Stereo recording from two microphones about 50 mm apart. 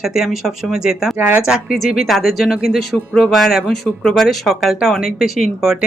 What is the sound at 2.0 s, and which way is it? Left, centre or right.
Speech, centre.